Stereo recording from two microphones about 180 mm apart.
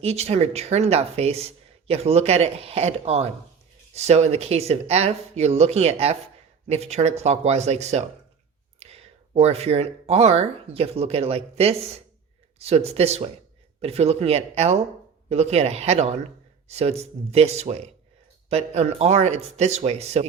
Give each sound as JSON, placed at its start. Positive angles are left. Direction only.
{"t": 0.0, "sound": "speech", "side_deg": -35}